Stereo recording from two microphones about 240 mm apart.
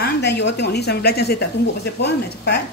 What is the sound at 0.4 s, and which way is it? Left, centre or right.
A woman's voice, left.